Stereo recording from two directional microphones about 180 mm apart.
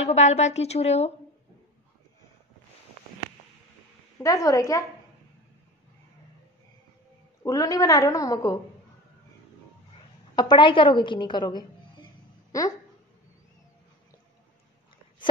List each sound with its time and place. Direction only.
0.0 s a woman's voice: 40° left (ahead or behind)
4.2 s a woman's voice: 20° left (ahead or behind)
7.4 s a woman's voice: 20° left (ahead or behind)
10.3 s a woman's voice: 25° left (ahead or behind)